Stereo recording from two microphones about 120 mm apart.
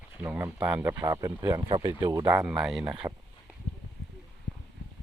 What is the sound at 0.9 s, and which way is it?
Speech, 25° right (ahead or behind).